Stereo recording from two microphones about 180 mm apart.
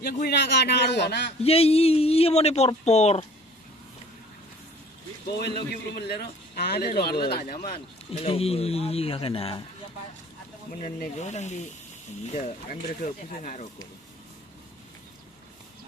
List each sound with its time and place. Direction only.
0.0 s a man's voice: 60° left (ahead or behind)
1.4 s speech: 35° left (ahead or behind)
5.9 s speech: 60° left (ahead or behind)
7.6 s speech: 35° left (ahead or behind)
10.7 s speech: 45° left (ahead or behind)